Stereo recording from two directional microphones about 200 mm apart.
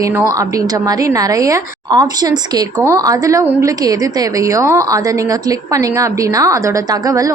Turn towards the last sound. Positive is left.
turn(degrees=-15)  # may be behind; listen again after turning